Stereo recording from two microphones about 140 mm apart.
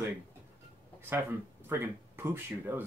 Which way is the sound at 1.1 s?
15° right (ahead or behind).